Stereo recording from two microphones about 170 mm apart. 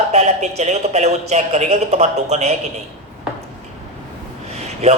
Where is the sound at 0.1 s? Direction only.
40° right (ahead or behind).